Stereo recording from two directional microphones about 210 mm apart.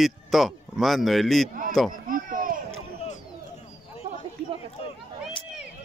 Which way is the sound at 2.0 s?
40° right (ahead or behind).